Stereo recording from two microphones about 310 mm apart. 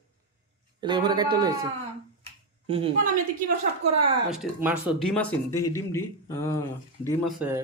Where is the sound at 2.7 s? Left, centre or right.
Centre.